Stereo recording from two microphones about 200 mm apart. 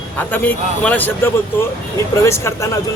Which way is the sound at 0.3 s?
10° left (ahead or behind).